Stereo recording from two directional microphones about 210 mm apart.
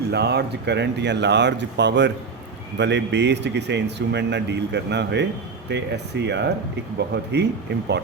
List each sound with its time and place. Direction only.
0.1 s speech: 50° right (ahead or behind)